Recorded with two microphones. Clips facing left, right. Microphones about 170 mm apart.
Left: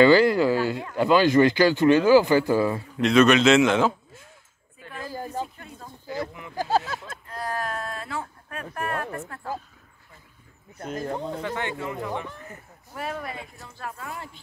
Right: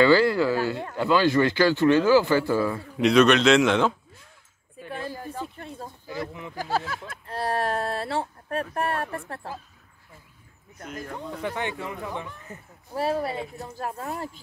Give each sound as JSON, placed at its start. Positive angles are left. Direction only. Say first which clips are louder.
{"t": 0.0, "sound": "speech", "louder": "left 2 dB", "side_deg": 15}
{"t": 3.0, "sound": "a man's voice", "louder": "even", "side_deg": 0}
{"t": 4.8, "sound": "a sound", "louder": "right 4 dB", "side_deg": -25}
{"t": 5.1, "sound": "a sound", "louder": "left 3 dB", "side_deg": 30}
{"t": 6.5, "sound": "speech", "louder": "left 4 dB", "side_deg": 25}
{"t": 7.2, "sound": "a sound", "louder": "right 4 dB", "side_deg": -30}
{"t": 10.8, "sound": "speech", "louder": "left 6 dB", "side_deg": 30}
{"t": 11.4, "sound": "speech", "louder": "even", "side_deg": -20}
{"t": 12.4, "sound": "speech", "louder": "right 1 dB", "side_deg": -30}